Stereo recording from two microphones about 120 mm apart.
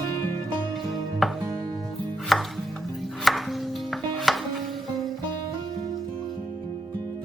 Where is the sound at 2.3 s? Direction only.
Centre (ahead or behind).